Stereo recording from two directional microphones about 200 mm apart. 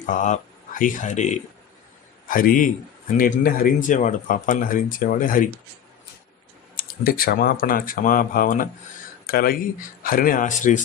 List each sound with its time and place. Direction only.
0.0 s a man's voice: 40° left (ahead or behind)
6.7 s speech: 45° left (ahead or behind)